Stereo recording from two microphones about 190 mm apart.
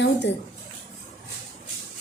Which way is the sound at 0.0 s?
65° left (ahead or behind).